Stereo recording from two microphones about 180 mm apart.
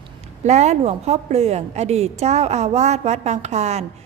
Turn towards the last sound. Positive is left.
turn(degrees=-40)  # may be behind; listen again after turning